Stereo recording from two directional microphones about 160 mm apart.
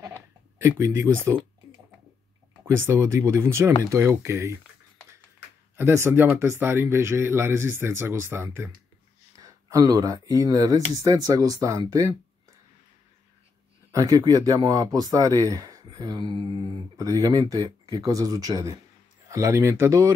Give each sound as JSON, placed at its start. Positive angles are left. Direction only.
{"t": 0.6, "sound": "speech", "side_deg": -15}
{"t": 2.6, "sound": "speech", "side_deg": -15}
{"t": 5.8, "sound": "speech", "side_deg": -15}
{"t": 13.9, "sound": "speech", "side_deg": -25}